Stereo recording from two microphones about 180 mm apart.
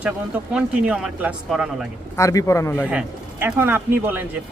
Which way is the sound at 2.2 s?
15° left (ahead or behind).